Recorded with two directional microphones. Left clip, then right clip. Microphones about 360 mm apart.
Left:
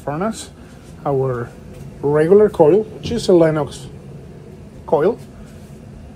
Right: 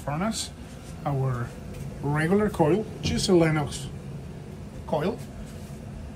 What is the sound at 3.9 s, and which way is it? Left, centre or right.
Vehicle, centre.